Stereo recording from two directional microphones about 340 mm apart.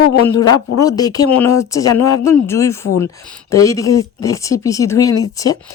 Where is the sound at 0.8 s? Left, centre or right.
Centre.